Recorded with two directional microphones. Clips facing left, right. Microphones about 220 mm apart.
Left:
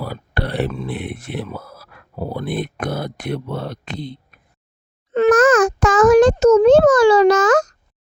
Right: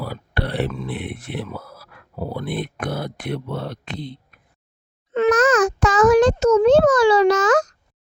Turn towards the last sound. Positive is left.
turn(degrees=45)  # may be behind; listen again after turning